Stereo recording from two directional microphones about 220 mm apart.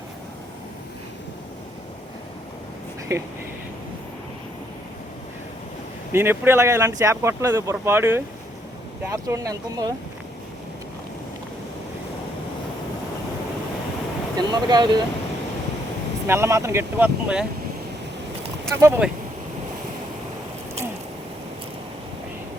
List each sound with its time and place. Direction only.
3.1 s speech: 15° right (ahead or behind)
6.1 s speech: 10° right (ahead or behind)
14.3 s speech: 20° right (ahead or behind)
16.2 s speech: 10° right (ahead or behind)
18.7 s speech: 10° right (ahead or behind)